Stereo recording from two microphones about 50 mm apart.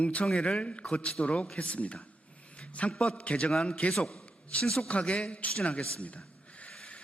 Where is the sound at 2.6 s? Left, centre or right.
Left.